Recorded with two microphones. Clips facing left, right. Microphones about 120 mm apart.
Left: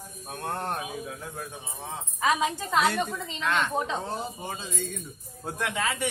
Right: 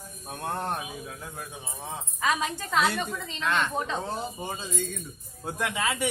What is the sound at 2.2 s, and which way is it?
Speech, 15° left (ahead or behind).